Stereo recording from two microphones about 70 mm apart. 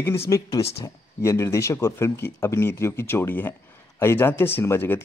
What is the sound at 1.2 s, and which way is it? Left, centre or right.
Speech, left.